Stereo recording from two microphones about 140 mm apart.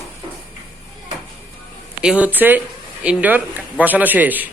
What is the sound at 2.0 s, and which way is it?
A man's voice, 10° right (ahead or behind).